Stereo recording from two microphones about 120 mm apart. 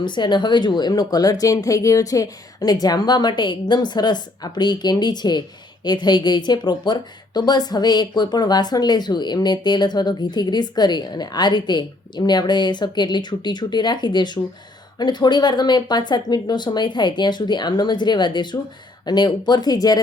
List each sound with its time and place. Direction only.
0.0 s speech: 40° left (ahead or behind)